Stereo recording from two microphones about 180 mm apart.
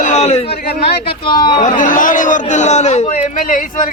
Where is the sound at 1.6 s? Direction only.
45° left (ahead or behind).